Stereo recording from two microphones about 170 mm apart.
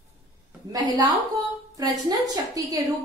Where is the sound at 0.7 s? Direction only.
25° right (ahead or behind).